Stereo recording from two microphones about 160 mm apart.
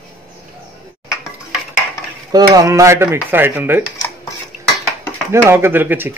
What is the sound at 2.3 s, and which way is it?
Dishes, 25° right (ahead or behind).